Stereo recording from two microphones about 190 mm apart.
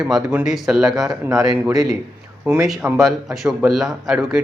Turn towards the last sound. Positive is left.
turn(degrees=0)  # may be behind; listen again after turning